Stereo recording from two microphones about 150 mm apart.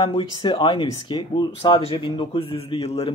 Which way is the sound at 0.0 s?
30° left (ahead or behind).